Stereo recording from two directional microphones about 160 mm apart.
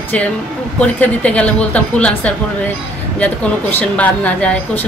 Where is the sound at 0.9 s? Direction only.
10° left (ahead or behind).